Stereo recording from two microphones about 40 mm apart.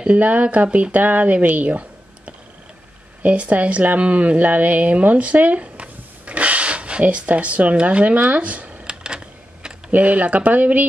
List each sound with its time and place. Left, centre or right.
0.0 s speech: right
8.8 s a sound: right
9.8 s speech: right